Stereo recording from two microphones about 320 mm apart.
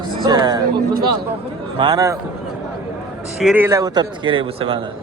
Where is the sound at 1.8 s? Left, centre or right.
Centre.